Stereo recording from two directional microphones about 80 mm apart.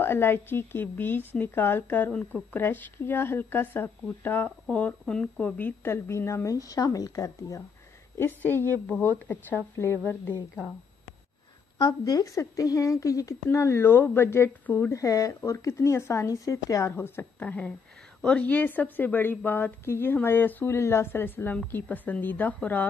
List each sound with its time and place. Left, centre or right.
0.0 s a woman's voice: left
8.2 s a woman's voice: left
8.8 s speech: centre
9.3 s a woman's voice: left
11.8 s a woman's voice: left
13.5 s a woman's voice: left
15.0 s a woman's voice: left
16.9 s a woman's voice: left
17.4 s a woman's voice: centre
20.7 s a woman's voice: left